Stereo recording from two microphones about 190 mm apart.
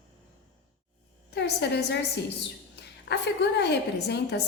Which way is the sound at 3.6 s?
60° left (ahead or behind).